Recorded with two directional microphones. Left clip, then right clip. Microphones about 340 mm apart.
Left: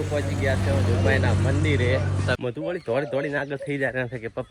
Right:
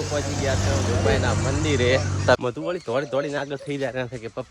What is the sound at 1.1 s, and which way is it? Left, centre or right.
Speech, centre.